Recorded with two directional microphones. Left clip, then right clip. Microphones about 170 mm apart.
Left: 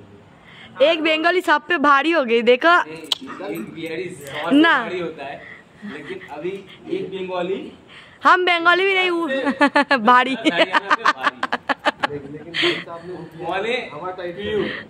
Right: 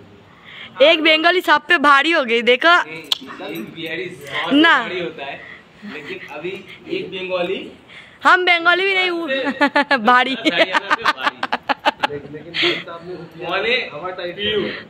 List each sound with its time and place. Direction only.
0.7 s a woman's voice: 15° right (ahead or behind)
1.0 s a woman's voice: centre (ahead or behind)
1.3 s a woman's voice: 15° left (ahead or behind)
3.4 s a man's voice: 5° left (ahead or behind)
7.2 s a man's voice: 15° left (ahead or behind)
13.4 s a woman's voice: 30° left (ahead or behind)
14.6 s a woman's voice: 20° left (ahead or behind)